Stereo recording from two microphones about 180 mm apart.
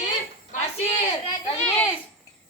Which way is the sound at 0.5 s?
45° left (ahead or behind).